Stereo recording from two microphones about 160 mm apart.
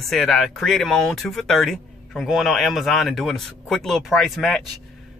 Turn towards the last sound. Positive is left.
turn(degrees=0)  # may be behind; listen again after turning